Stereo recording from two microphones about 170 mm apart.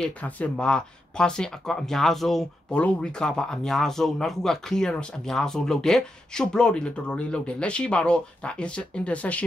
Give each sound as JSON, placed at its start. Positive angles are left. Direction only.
{"t": 0.0, "sound": "speech", "side_deg": 5}